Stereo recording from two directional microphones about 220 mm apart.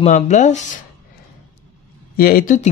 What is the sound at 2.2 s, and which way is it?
Speech, 40° left (ahead or behind).